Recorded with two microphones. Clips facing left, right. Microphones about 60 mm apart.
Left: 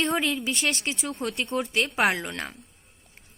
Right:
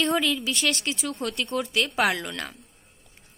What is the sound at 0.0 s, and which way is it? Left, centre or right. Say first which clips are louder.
A woman's voice: right 1 dB; left.